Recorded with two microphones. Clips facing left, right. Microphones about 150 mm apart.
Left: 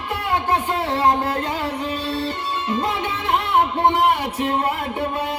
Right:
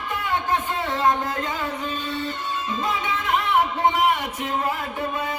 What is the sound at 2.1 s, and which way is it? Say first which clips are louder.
Music: left 5 dB; 30° left (ahead or behind).